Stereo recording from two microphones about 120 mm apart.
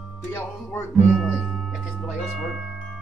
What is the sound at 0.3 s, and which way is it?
Speech, 20° left (ahead or behind).